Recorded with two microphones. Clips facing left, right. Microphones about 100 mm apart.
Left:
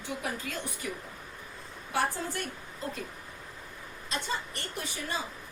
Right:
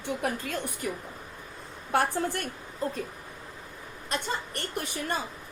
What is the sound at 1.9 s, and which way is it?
Speech, 55° right (ahead or behind).